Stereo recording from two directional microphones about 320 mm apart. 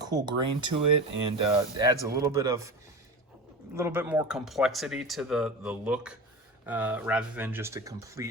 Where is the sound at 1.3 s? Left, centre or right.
Centre.